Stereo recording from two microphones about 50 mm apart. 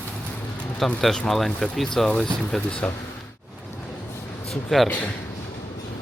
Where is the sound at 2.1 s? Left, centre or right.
Centre.